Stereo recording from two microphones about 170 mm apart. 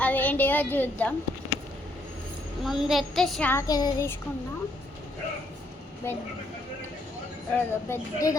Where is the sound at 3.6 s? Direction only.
20° left (ahead or behind).